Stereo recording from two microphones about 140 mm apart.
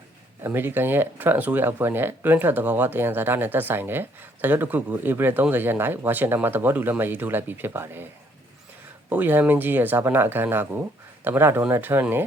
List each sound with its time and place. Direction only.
0.4 s speech: 15° right (ahead or behind)
9.0 s speech: 15° right (ahead or behind)